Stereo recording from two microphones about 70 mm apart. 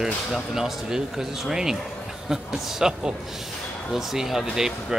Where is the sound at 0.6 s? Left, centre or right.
Centre.